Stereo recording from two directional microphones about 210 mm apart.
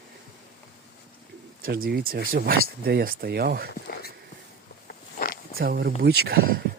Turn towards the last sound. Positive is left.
turn(degrees=-50)  # may be behind; listen again after turning